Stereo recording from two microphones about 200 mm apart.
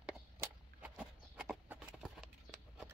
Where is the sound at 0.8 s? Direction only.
5° right (ahead or behind).